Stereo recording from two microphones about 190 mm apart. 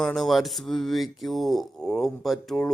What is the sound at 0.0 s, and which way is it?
Speech, centre (ahead or behind).